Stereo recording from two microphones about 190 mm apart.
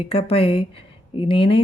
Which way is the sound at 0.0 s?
30° left (ahead or behind).